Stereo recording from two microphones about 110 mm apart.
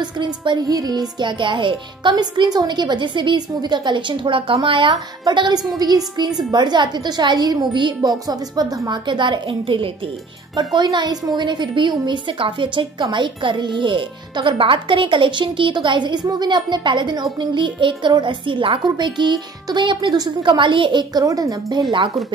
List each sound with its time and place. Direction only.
0.0 s a woman's voice: 45° right (ahead or behind)
10.5 s a woman's voice: 40° right (ahead or behind)